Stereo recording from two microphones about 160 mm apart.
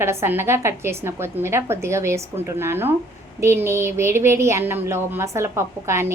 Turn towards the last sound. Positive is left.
turn(degrees=-15)  # may be behind; listen again after turning